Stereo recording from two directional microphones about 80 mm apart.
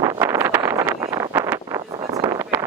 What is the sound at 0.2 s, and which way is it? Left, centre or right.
Vehicle, right.